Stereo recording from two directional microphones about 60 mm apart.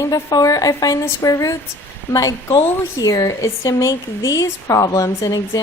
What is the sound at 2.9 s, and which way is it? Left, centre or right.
Speech, left.